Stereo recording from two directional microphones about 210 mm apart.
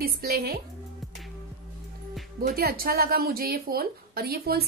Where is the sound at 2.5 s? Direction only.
45° right (ahead or behind).